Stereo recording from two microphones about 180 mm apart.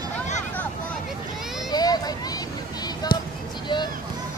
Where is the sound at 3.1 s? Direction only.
55° left (ahead or behind).